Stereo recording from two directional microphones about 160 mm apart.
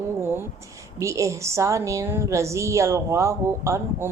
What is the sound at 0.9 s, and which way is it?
A woman's voice, 20° right (ahead or behind).